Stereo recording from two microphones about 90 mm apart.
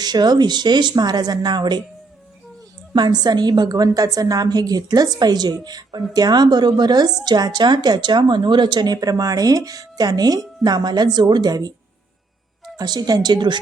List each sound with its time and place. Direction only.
0.0 s speech: 50° right (ahead or behind)
2.9 s speech: 55° right (ahead or behind)
12.7 s speech: 50° right (ahead or behind)